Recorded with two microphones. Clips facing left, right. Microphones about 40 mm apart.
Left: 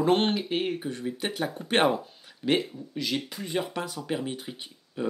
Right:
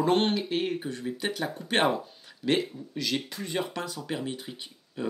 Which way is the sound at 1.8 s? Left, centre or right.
Centre.